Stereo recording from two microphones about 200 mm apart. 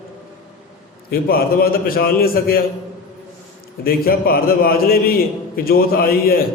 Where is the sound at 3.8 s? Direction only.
50° left (ahead or behind).